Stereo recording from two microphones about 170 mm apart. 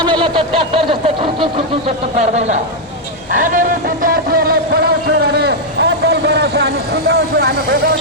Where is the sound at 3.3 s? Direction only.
50° right (ahead or behind); by 6.7 s 80° right.